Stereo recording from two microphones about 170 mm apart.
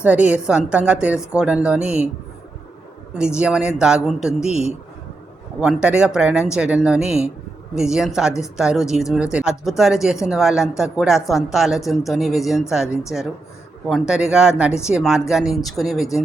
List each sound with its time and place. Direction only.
0.0 s a woman's voice: 10° right (ahead or behind)
3.2 s speech: 5° right (ahead or behind)
4.4 s speech: 40° left (ahead or behind)
5.5 s speech: 5° right (ahead or behind)